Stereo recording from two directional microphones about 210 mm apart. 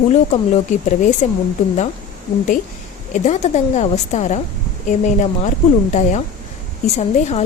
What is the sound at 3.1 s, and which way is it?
A woman's voice, 35° left (ahead or behind).